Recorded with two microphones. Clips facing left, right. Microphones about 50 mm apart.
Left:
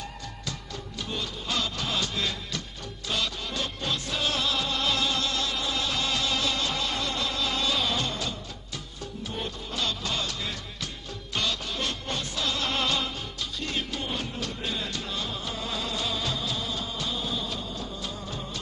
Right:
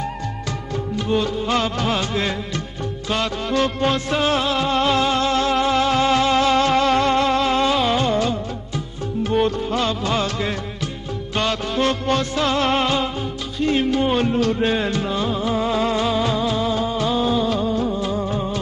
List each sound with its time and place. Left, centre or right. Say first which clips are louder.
0.5 s music: right 11 dB; right
3.1 s music: right 9 dB; right
9.3 s music: right 17 dB; right
9.8 s music: right 6 dB; right
12.8 s music: right 8 dB; right
15.0 s music: right 12 dB; right
17.7 s music: right 14 dB; right